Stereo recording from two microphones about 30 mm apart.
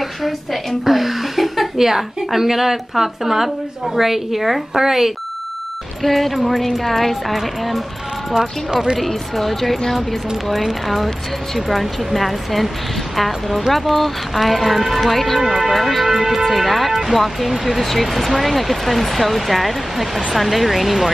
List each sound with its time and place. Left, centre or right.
0.0 s a woman's voice: centre
6.0 s speech: centre
8.3 s speech: right
9.0 s speech: centre
16.1 s speech: centre